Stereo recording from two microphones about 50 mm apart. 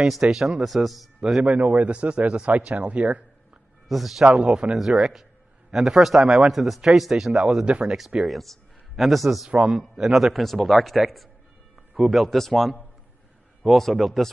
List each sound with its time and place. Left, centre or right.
0.0 s a man's voice: centre
1.4 s speech: right
1.9 s a man's voice: right
3.9 s a man's voice: centre
12.0 s speech: centre